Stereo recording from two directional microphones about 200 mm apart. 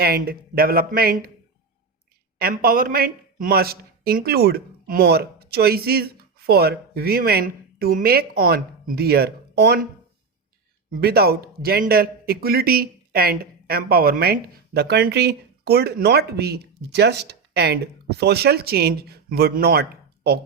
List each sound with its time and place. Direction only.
0.0 s a man's voice: 50° right (ahead or behind)
2.4 s a man's voice: 50° right (ahead or behind)
11.0 s a man's voice: 50° right (ahead or behind)